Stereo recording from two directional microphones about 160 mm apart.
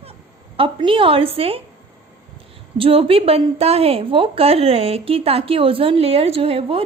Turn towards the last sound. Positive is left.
turn(degrees=-35)  # may be behind; listen again after turning